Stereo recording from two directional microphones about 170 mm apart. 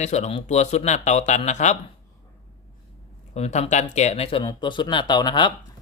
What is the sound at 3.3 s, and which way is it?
Speech, 40° left (ahead or behind).